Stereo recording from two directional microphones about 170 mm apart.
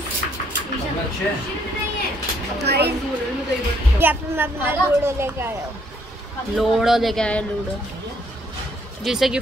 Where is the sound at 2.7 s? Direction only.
70° right (ahead or behind).